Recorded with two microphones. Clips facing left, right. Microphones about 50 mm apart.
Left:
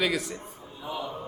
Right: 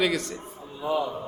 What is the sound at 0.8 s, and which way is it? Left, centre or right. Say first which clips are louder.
Speech: right 8 dB; right.